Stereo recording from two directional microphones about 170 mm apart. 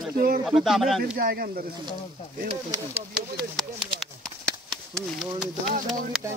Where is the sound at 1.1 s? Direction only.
65° right (ahead or behind).